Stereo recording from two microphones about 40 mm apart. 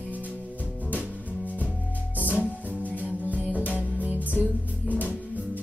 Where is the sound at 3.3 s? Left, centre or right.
Left.